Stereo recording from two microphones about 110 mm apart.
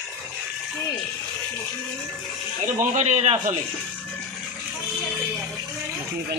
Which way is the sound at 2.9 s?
85° right.